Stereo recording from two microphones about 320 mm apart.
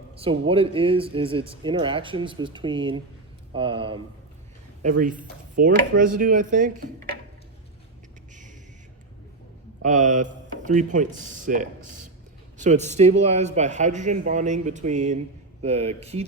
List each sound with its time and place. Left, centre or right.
0.2 s a man's voice: centre
8.3 s a sound: right
9.8 s a man's voice: right